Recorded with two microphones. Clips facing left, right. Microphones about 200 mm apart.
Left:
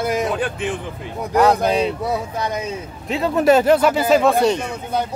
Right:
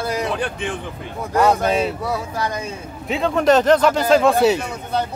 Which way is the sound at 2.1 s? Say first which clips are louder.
Left 1 dB; 20° left (ahead or behind).